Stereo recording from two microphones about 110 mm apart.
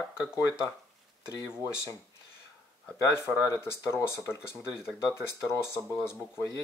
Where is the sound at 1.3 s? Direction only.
25° left (ahead or behind).